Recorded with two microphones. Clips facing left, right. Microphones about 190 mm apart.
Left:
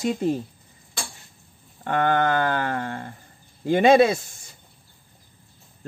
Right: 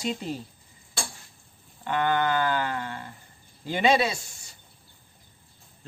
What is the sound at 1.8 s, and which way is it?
A man's voice, 50° left (ahead or behind).